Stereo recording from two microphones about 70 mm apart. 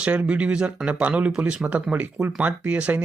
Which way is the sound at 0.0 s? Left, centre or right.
Centre.